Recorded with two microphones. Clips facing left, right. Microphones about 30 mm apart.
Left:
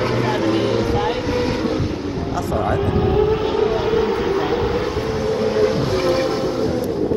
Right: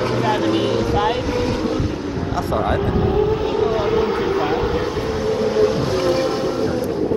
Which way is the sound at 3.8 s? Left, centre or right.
Centre.